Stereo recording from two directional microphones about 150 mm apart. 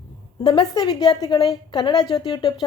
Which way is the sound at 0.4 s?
30° left (ahead or behind).